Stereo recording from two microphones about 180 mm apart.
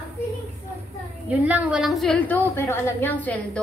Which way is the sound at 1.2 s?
10° right (ahead or behind).